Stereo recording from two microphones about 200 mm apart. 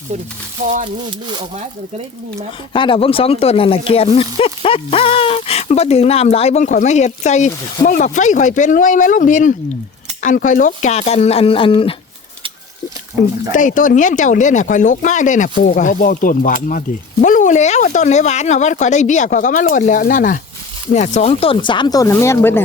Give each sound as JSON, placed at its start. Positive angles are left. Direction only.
{"t": 0.6, "sound": "speech", "side_deg": -40}
{"t": 2.7, "sound": "speech", "side_deg": 25}
{"t": 13.5, "sound": "speech", "side_deg": 40}